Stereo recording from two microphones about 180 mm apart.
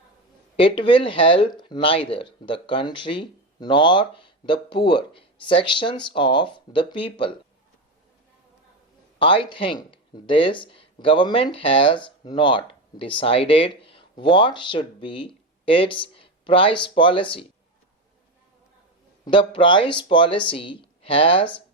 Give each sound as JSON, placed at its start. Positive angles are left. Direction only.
{"t": 0.5, "sound": "speech", "side_deg": 30}
{"t": 9.1, "sound": "speech", "side_deg": 30}
{"t": 19.2, "sound": "speech", "side_deg": 30}